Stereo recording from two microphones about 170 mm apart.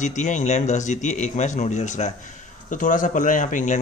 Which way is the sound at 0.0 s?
45° left (ahead or behind).